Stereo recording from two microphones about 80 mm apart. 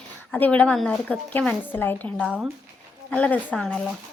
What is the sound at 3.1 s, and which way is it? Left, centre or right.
Speech, centre.